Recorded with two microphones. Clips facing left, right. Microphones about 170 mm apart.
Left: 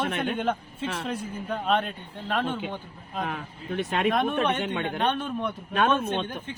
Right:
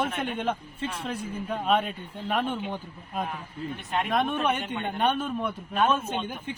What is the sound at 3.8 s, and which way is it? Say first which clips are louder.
Speech: left 6 dB; 90° left.